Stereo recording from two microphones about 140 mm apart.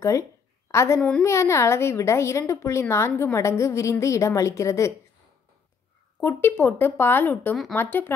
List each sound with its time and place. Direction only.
0.7 s a woman's voice: 20° left (ahead or behind)
6.2 s speech: 15° left (ahead or behind)